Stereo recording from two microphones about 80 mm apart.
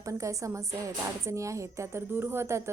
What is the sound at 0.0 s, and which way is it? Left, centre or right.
A woman's voice, right.